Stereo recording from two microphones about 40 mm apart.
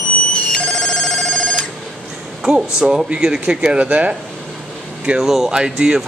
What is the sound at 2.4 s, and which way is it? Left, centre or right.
Speech, centre.